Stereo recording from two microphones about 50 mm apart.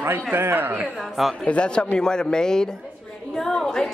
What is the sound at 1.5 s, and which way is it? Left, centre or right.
A man's voice, left.